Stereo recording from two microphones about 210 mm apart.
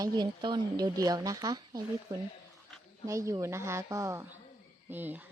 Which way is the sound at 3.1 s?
15° right (ahead or behind).